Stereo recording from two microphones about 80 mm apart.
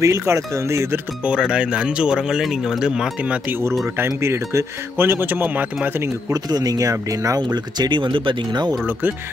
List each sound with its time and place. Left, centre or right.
0.0 s speech: right
1.2 s speech: centre
4.0 s speech: right
6.3 s speech: right